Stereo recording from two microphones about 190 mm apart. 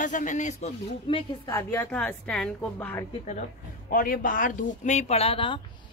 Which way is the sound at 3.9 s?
45° left (ahead or behind).